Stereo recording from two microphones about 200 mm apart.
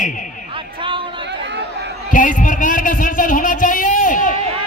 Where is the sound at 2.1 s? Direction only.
40° left (ahead or behind).